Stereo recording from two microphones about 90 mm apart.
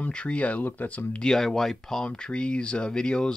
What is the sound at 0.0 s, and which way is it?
Speech, 15° left (ahead or behind).